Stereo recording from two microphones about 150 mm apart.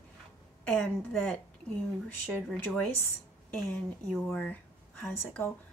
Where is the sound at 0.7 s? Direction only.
10° left (ahead or behind).